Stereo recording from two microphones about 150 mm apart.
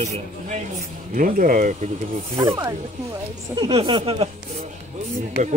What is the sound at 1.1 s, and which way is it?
Speech, 65° right (ahead or behind).